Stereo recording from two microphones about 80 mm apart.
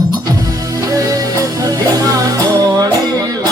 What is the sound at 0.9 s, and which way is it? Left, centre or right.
Music, right.